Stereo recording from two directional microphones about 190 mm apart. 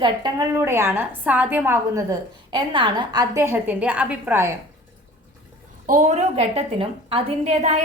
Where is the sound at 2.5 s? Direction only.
25° right (ahead or behind).